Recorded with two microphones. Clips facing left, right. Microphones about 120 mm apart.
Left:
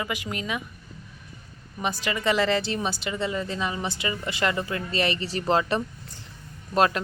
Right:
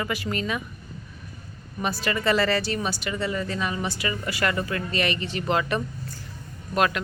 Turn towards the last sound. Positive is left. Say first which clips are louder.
# left 2 dB
turn(degrees=30)  # may be behind; listen again after turning